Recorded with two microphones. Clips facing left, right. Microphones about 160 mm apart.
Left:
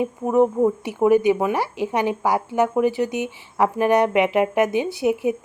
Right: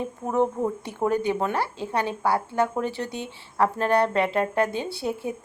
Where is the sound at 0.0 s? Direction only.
10° left (ahead or behind).